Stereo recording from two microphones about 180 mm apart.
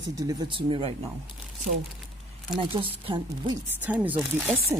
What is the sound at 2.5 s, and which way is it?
Speech, 30° right (ahead or behind).